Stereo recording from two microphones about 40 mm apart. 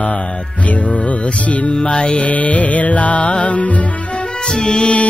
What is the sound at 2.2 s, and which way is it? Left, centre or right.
Music, left.